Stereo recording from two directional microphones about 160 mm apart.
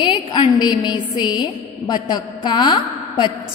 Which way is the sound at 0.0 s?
30° left (ahead or behind).